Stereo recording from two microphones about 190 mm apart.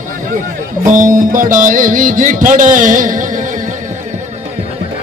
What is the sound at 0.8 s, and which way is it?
Music, 45° right (ahead or behind).